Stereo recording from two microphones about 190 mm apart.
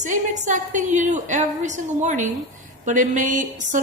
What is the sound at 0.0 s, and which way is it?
Speech, 40° right (ahead or behind).